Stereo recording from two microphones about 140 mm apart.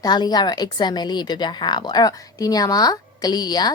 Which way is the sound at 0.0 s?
30° left (ahead or behind).